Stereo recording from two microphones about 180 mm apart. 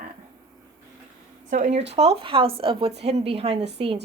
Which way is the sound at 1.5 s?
35° right (ahead or behind).